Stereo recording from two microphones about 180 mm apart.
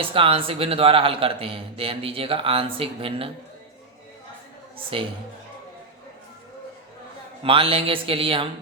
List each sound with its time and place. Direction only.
0.0 s a man's voice: 30° right (ahead or behind)
4.9 s speech: 30° right (ahead or behind)
7.4 s speech: 30° right (ahead or behind)